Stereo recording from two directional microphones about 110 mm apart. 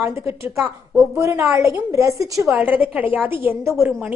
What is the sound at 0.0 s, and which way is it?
A woman's voice, 20° right (ahead or behind).